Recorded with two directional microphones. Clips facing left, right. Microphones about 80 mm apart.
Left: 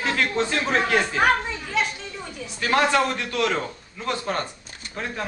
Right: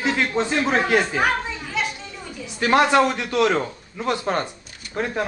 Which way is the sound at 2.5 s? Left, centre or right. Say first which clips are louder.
Right 4 dB; right.